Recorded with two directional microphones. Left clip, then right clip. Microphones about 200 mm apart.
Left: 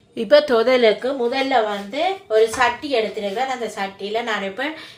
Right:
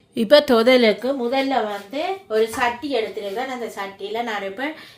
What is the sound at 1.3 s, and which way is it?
Speech, 35° right (ahead or behind).